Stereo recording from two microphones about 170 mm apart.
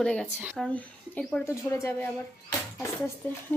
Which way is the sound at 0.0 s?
5° left (ahead or behind).